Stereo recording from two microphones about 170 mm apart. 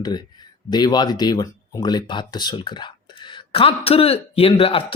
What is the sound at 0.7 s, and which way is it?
Speech, 25° left (ahead or behind).